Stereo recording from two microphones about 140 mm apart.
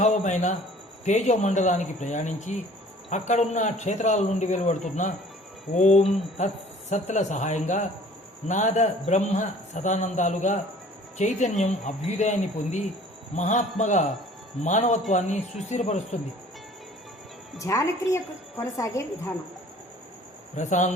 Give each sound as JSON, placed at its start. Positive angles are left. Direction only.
{"t": 0.0, "sound": "a man's voice", "side_deg": 55}
{"t": 13.3, "sound": "a man's voice", "side_deg": 60}
{"t": 17.6, "sound": "a woman's voice", "side_deg": 20}
{"t": 20.6, "sound": "a man's voice", "side_deg": 60}